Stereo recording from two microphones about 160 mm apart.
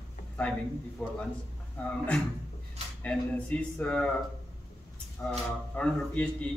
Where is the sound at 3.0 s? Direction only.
10° left (ahead or behind).